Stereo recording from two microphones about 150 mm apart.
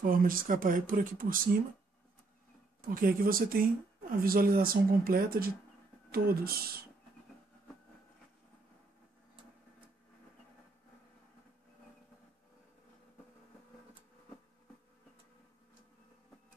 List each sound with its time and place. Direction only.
0.0 s speech: 70° right (ahead or behind)
2.8 s speech: 70° right (ahead or behind)
6.1 s speech: 90° right